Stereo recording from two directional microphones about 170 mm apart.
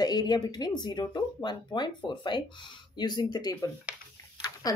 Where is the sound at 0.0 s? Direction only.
25° left (ahead or behind).